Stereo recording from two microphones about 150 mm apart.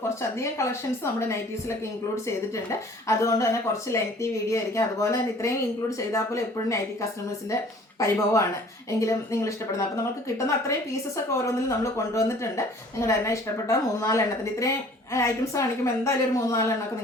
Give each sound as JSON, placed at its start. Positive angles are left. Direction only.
{"t": 0.2, "sound": "a woman's voice", "side_deg": 20}
{"t": 2.2, "sound": "a woman's voice", "side_deg": 20}